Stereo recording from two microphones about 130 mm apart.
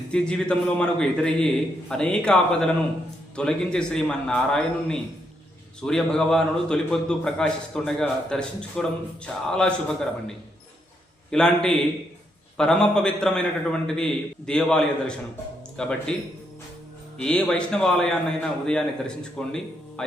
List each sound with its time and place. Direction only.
0.1 s a man's voice: 5° left (ahead or behind)
17.2 s a man's voice: 5° left (ahead or behind)